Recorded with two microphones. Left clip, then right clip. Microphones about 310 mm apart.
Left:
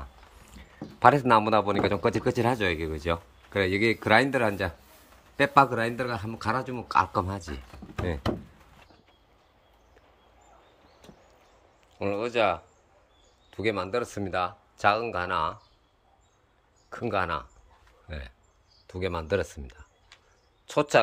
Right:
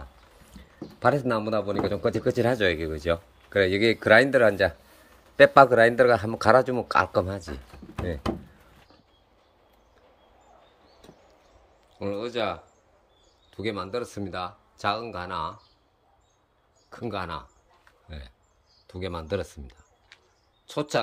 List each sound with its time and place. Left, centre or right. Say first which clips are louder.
0.6 s speech: left 7 dB; centre
12.0 s speech: left 3 dB; centre
16.9 s speech: left 4 dB; centre
20.1 s a sound: right 2 dB; centre
20.6 s speech: left 5 dB; centre